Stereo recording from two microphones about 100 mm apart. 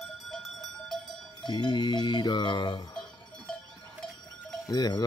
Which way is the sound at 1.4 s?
45° left (ahead or behind).